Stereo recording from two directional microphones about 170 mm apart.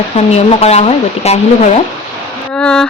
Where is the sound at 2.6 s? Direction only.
5° left (ahead or behind).